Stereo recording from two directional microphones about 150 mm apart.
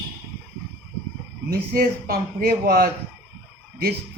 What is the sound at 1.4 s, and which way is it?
A man's voice, 85° right.